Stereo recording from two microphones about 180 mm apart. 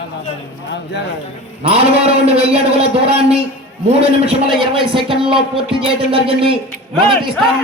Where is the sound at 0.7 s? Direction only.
65° left (ahead or behind).